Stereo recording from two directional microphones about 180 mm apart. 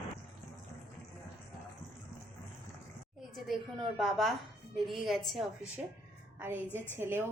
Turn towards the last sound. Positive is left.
turn(degrees=-10)  # may be behind; listen again after turning